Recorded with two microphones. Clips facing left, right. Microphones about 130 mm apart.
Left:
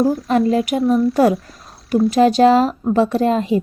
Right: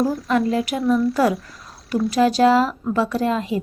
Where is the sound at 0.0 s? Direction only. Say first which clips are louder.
Left 4 dB; centre (ahead or behind).